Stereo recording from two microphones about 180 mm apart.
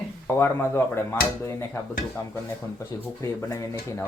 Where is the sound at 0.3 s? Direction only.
15° left (ahead or behind).